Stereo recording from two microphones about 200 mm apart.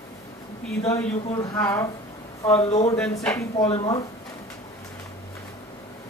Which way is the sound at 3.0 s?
5° left (ahead or behind).